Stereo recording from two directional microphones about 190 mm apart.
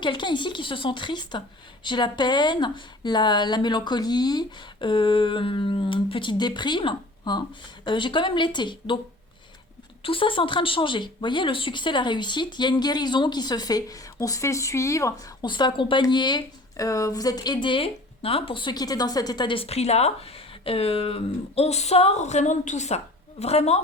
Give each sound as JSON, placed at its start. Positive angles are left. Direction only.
{"t": 0.0, "sound": "speech", "side_deg": 25}
{"t": 10.0, "sound": "a woman's voice", "side_deg": 30}